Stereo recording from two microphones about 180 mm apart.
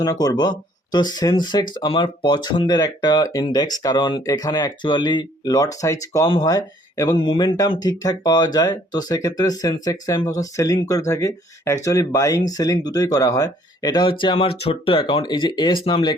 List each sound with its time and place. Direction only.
0.0 s speech: 20° left (ahead or behind)
7.2 s speech: 30° left (ahead or behind)